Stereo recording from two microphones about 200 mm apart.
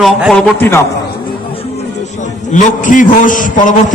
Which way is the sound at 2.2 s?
40° left (ahead or behind).